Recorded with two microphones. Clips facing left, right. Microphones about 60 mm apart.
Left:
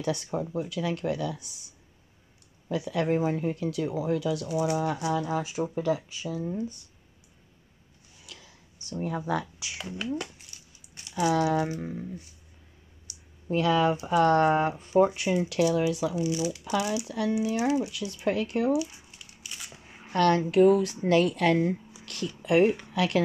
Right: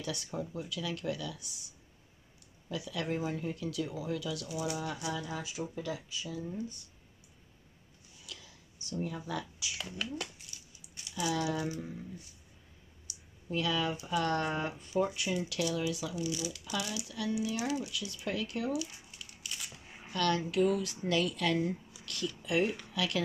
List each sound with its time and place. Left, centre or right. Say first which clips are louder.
0.0 s speech: left 8 dB; left
2.7 s speech: left 9 dB; left
8.3 s a sound: left 1 dB; left
9.8 s speech: left 8 dB; centre
10.5 s dog: left 1 dB; left
11.0 s speech: left 8 dB; left
18.9 s a sound: left 1 dB; centre
20.1 s speech: left 8 dB; left
21.7 s a sound: left 6 dB; left
22.4 s speech: left 10 dB; left